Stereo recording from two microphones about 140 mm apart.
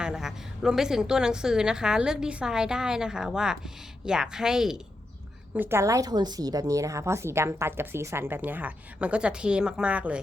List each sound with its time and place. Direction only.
0.0 s a woman's voice: 5° right (ahead or behind)
5.5 s a woman's voice: 15° right (ahead or behind)